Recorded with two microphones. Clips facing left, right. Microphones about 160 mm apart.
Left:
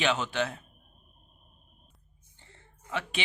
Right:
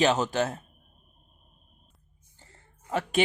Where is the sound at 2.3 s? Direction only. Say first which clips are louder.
Even; 40° right (ahead or behind).